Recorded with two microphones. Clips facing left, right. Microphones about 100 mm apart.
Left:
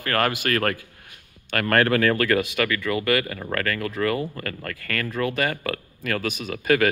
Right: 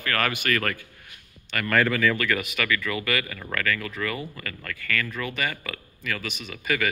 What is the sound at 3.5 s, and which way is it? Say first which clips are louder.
A man's voice: left 2 dB; 45° left (ahead or behind).